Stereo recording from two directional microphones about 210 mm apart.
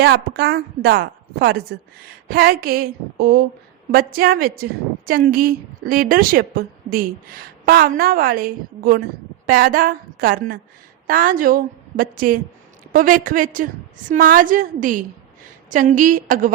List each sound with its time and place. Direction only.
0.0 s a woman's voice: 50° right (ahead or behind)